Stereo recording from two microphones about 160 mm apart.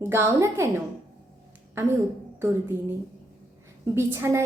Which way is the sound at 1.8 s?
15° right (ahead or behind).